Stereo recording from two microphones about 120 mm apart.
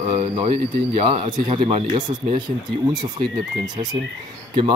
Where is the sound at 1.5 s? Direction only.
50° right (ahead or behind).